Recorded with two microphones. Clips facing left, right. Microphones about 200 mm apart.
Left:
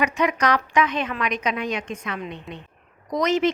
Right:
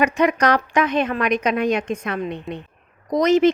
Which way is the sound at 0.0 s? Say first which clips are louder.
Right 4 dB; 50° right (ahead or behind).